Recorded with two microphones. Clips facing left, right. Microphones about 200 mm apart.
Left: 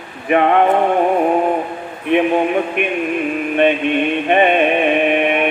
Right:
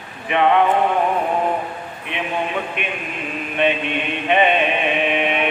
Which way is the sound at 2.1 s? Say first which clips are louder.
Left 10 dB; 55° left (ahead or behind).